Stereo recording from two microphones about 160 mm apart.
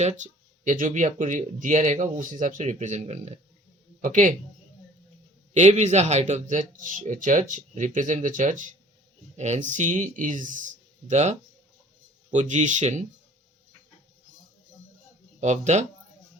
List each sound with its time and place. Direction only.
0.2 s speech: 50° right (ahead or behind)
5.5 s speech: 45° right (ahead or behind)
15.4 s speech: 45° right (ahead or behind)